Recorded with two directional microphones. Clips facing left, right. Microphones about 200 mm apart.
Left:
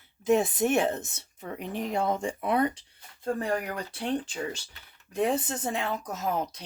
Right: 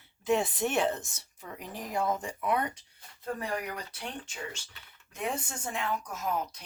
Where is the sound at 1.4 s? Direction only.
35° left (ahead or behind).